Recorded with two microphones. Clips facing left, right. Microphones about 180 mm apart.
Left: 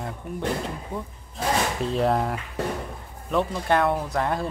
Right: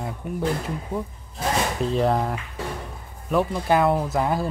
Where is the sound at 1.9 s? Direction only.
Centre (ahead or behind).